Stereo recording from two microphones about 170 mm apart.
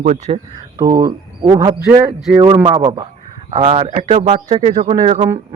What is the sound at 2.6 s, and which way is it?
Speech, 35° right (ahead or behind).